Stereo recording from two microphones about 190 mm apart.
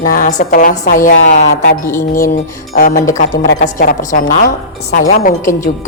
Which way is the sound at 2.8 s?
45° left (ahead or behind).